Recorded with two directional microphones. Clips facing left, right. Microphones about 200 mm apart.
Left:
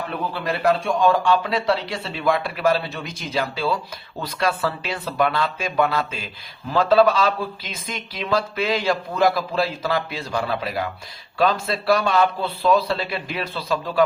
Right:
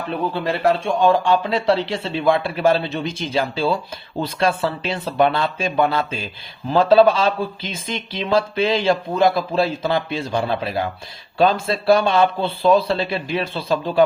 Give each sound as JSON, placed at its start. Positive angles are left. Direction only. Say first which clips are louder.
{"t": 0.3, "sound": "speech", "louder": "right 1 dB", "side_deg": -25}